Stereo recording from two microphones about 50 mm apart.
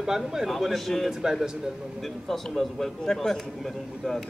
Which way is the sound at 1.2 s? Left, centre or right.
Centre.